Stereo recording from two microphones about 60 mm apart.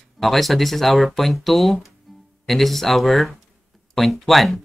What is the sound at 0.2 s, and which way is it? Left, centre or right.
Speech, centre.